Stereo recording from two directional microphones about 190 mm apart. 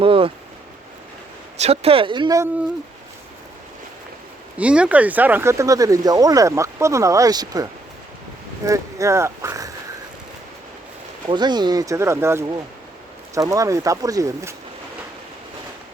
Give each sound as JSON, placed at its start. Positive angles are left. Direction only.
{"t": 0.0, "sound": "a sound", "side_deg": -30}
{"t": 1.5, "sound": "speech", "side_deg": -35}
{"t": 4.5, "sound": "speech", "side_deg": -5}
{"t": 11.3, "sound": "speech", "side_deg": -20}